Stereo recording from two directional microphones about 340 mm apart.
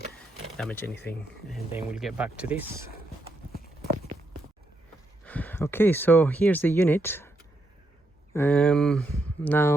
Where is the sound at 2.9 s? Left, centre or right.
Left.